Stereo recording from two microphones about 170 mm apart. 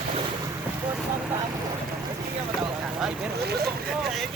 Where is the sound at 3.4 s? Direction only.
70° right (ahead or behind).